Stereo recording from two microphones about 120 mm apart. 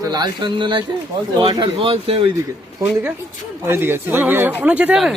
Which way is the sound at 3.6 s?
20° right (ahead or behind).